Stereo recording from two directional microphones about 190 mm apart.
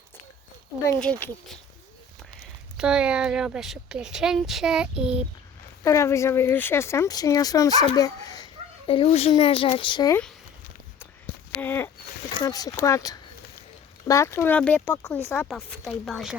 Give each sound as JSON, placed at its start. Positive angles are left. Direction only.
{"t": 0.9, "sound": "speech", "side_deg": 5}
{"t": 2.4, "sound": "speech", "side_deg": -5}
{"t": 5.8, "sound": "speech", "side_deg": 15}
{"t": 8.9, "sound": "speech", "side_deg": 30}
{"t": 11.6, "sound": "speech", "side_deg": 10}